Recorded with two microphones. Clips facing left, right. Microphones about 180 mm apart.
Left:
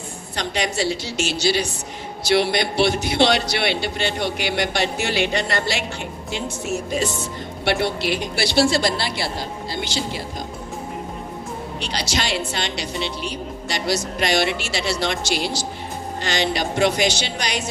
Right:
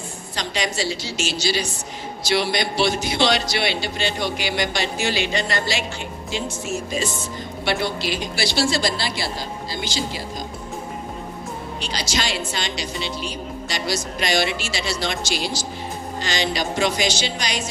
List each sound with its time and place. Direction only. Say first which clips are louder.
0.3 s a woman's voice: left 2 dB; 60° left (ahead or behind)
11.8 s a woman's voice: left 1 dB; 65° left (ahead or behind)